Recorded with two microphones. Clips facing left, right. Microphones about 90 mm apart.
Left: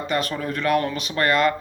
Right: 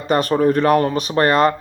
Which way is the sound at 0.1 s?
40° right (ahead or behind).